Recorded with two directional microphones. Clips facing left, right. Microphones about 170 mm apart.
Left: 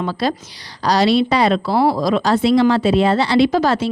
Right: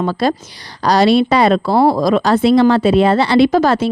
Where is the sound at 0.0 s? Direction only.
50° right (ahead or behind).